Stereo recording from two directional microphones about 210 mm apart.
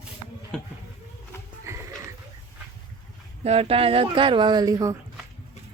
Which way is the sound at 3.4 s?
30° right (ahead or behind).